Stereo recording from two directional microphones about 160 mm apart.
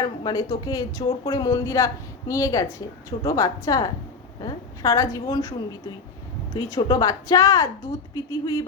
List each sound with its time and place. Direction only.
0.0 s a woman's voice: 25° left (ahead or behind)